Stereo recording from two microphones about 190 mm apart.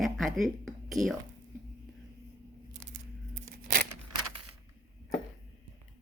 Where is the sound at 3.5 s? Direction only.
55° right (ahead or behind).